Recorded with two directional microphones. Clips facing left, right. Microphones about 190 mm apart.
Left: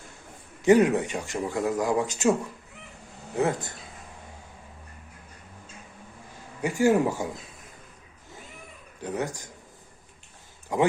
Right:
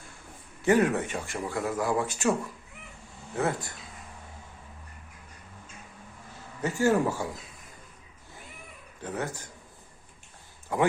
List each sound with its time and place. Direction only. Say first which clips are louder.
0.6 s speech: left 4 dB; 15° left (ahead or behind)
3.3 s speech: left 3 dB; 20° left (ahead or behind)
6.3 s speech: left 2 dB; 15° left (ahead or behind)
9.0 s speech: left 3 dB; 15° left (ahead or behind)
10.7 s speech: left 2 dB; 15° left (ahead or behind)